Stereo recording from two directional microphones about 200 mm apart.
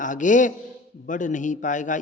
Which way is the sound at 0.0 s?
40° left (ahead or behind).